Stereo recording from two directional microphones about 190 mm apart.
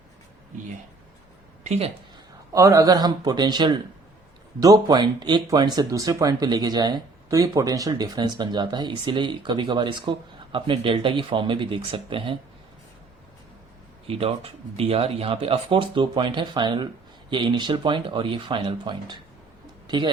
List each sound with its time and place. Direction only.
1.6 s speech: 35° right (ahead or behind)
2.5 s speech: 15° right (ahead or behind)
14.1 s speech: 30° right (ahead or behind)